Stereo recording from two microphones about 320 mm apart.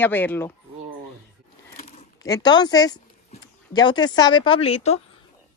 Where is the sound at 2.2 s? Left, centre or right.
Centre.